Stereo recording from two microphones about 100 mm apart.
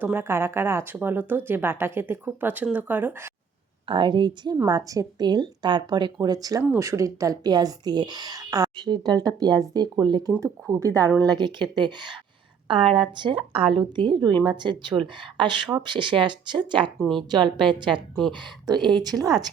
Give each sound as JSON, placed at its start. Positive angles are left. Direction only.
{"t": 0.0, "sound": "speech", "side_deg": -20}
{"t": 3.8, "sound": "speech", "side_deg": -55}
{"t": 4.6, "sound": "speech", "side_deg": -35}
{"t": 10.4, "sound": "speech", "side_deg": -30}
{"t": 11.3, "sound": "a woman's voice", "side_deg": -45}
{"t": 18.1, "sound": "speech", "side_deg": 0}
{"t": 19.0, "sound": "speech", "side_deg": -40}